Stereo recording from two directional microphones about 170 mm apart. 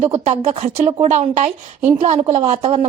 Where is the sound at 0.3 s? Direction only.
40° right (ahead or behind).